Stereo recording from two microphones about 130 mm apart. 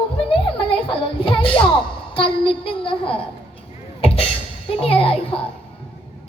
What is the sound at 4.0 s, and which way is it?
Music, 45° left (ahead or behind).